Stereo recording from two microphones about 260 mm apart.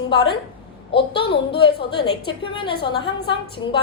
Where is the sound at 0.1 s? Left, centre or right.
Centre.